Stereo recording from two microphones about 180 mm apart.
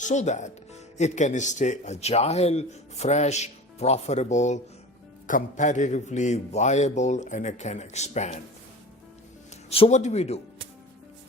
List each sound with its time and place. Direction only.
0.0 s speech: 40° left (ahead or behind)
9.6 s speech: 35° left (ahead or behind)